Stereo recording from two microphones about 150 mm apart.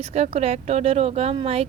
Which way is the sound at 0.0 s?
45° right (ahead or behind).